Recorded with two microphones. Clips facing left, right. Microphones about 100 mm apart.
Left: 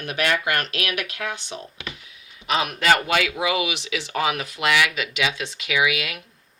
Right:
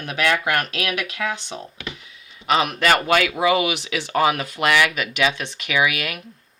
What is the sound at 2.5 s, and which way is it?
Speech, 60° right (ahead or behind).